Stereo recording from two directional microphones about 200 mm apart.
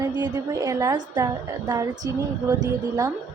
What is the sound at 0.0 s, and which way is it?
A woman's voice, 20° right (ahead or behind).